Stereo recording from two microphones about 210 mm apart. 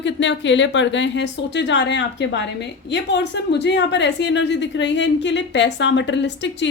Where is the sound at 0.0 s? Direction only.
60° left (ahead or behind).